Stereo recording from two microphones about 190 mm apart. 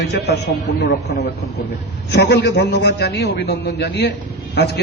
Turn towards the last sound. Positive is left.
turn(degrees=60)  # may be behind; listen again after turning